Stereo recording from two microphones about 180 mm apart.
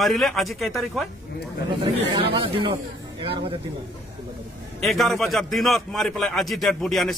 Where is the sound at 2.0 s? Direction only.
30° right (ahead or behind).